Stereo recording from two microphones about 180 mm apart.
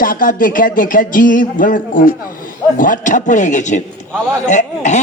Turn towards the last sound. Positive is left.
turn(degrees=40)  # may be behind; listen again after turning